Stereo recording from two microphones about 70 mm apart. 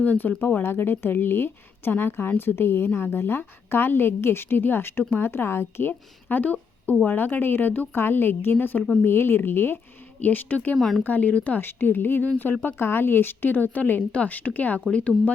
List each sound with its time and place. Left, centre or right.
0.0 s a woman's voice: left
5.9 s a woman's voice: left
10.8 s speech: centre
11.0 s speech: left